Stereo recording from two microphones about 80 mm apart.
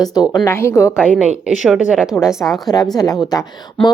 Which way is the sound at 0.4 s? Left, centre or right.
Left.